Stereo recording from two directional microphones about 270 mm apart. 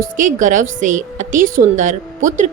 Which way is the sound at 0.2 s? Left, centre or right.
Right.